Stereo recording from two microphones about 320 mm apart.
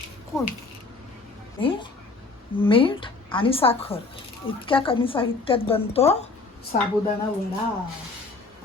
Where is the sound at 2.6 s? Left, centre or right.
Centre.